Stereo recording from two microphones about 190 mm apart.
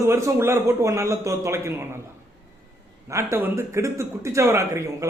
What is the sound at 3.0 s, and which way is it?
A man's voice, 15° right (ahead or behind).